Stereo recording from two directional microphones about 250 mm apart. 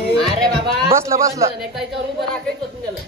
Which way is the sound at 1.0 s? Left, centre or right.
Centre.